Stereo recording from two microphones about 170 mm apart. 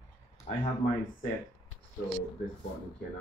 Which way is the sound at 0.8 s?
45° left (ahead or behind).